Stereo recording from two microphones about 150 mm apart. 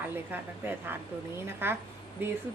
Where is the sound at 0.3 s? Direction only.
15° right (ahead or behind).